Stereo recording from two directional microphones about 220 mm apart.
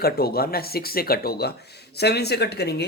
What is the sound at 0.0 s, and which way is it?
Speech, 45° left (ahead or behind).